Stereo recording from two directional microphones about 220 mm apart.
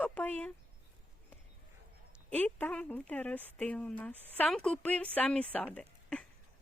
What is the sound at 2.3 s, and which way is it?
Speech, 5° left (ahead or behind).